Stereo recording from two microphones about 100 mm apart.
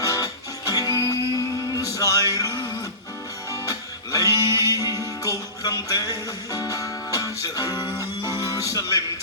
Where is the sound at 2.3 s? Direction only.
35° left (ahead or behind).